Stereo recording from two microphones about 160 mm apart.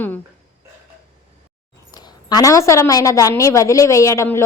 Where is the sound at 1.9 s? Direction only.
25° left (ahead or behind).